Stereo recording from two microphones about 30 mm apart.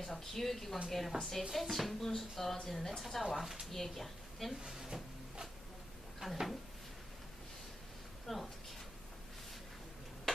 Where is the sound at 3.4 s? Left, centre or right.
Centre.